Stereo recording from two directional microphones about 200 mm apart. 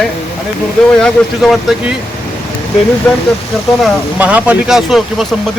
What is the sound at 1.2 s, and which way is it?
Speech, 5° left (ahead or behind).